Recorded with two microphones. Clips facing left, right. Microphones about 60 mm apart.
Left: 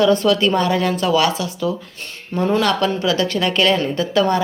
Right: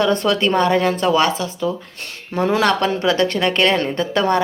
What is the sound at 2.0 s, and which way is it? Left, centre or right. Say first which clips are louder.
Speech: right 2 dB; right.